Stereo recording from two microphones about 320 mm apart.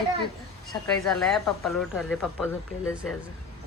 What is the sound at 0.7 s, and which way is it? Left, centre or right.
Speech, centre.